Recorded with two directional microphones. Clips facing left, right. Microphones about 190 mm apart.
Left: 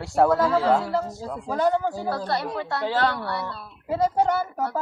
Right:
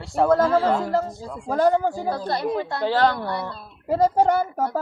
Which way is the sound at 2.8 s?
35° right (ahead or behind).